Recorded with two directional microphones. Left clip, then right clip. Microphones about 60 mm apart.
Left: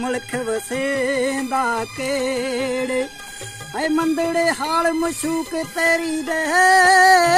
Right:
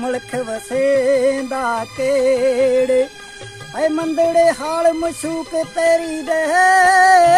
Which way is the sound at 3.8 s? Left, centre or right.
Right.